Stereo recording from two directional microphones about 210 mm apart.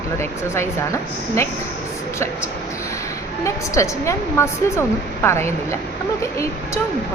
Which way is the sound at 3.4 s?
15° left (ahead or behind).